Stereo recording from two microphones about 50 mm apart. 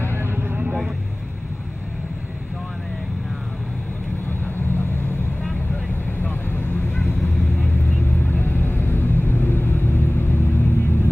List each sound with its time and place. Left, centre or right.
0.0 s vehicle: right
4.3 s vehicle: left
6.2 s vehicle: left